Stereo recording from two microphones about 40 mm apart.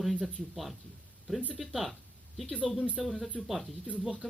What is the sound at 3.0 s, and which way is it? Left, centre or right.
Speech, centre.